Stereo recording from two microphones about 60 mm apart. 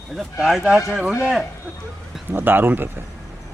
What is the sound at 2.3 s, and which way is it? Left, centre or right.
Speech, right.